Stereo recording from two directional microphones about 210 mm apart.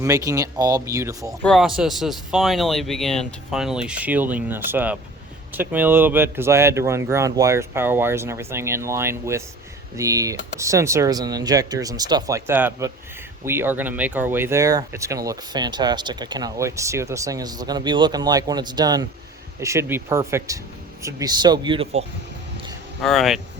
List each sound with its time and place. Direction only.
0.0 s speech: 15° right (ahead or behind)
1.4 s speech: centre (ahead or behind); by 22.0 s 25° right (ahead or behind)
23.0 s speech: centre (ahead or behind)